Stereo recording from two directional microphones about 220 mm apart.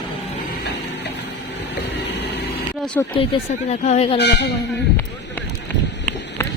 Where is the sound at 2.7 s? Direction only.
5° left (ahead or behind).